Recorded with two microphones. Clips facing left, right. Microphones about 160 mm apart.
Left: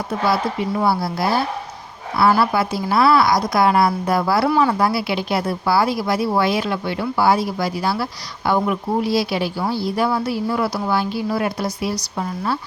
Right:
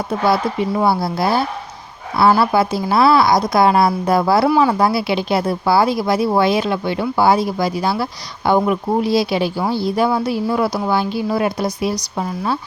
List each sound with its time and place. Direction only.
0.8 s a woman's voice: 25° right (ahead or behind)